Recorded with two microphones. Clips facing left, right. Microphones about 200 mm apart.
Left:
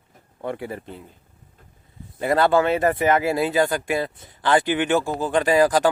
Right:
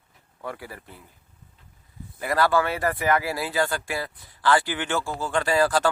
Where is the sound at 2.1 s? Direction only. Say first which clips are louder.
Left 4 dB; 25° left (ahead or behind).